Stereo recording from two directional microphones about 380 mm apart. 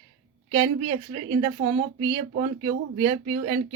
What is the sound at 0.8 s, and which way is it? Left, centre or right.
Speech, centre.